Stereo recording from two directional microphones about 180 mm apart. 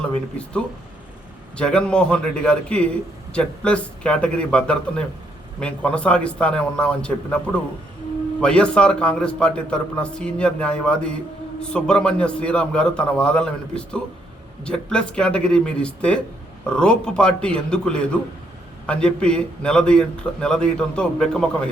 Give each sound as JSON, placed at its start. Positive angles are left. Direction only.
{"t": 0.0, "sound": "a man's voice", "side_deg": 5}